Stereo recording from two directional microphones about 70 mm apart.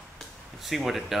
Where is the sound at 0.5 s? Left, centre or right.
Centre.